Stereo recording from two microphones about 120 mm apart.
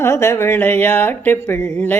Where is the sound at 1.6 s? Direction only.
15° left (ahead or behind).